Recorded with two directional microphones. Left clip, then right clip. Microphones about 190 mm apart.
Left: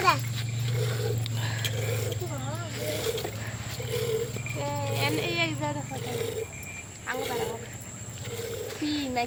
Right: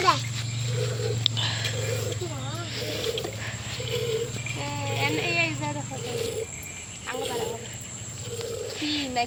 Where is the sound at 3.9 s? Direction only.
15° left (ahead or behind).